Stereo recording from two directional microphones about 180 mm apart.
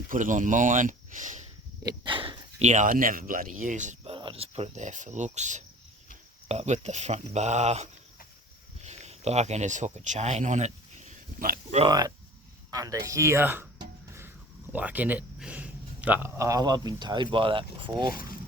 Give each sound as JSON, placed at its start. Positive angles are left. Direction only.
{"t": 0.1, "sound": "speech", "side_deg": -45}
{"t": 1.8, "sound": "speech", "side_deg": -25}
{"t": 4.1, "sound": "speech", "side_deg": -30}
{"t": 11.9, "sound": "speech", "side_deg": -20}
{"t": 14.7, "sound": "speech", "side_deg": -10}
{"t": 18.1, "sound": "speech", "side_deg": 50}